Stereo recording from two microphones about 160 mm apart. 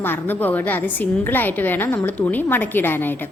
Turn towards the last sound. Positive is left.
turn(degrees=15)  # may be behind; listen again after turning